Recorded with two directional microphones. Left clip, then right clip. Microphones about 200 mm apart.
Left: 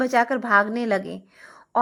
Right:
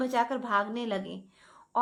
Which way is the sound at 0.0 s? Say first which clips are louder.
Left 8 dB; 25° left (ahead or behind).